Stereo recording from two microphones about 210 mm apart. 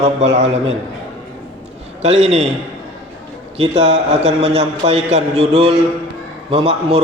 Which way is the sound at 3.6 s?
30° right (ahead or behind).